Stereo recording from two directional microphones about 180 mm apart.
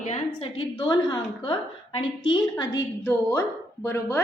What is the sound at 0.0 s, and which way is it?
Speech, 35° left (ahead or behind).